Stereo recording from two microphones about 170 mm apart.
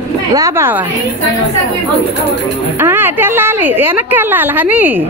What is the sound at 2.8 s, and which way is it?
A woman's voice, 10° right (ahead or behind).